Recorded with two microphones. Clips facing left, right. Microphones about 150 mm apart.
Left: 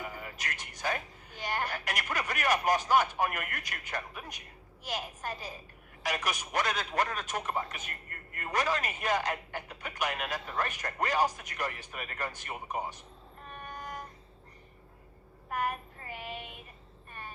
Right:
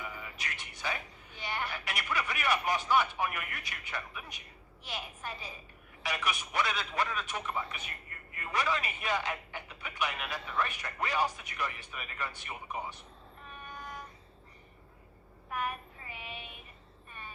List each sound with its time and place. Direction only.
0.0 s speech: 45° left (ahead or behind)
13.5 s train: 45° left (ahead or behind)
15.5 s speech: 45° left (ahead or behind)